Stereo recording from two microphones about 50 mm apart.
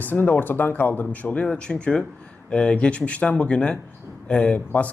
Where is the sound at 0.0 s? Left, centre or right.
Left.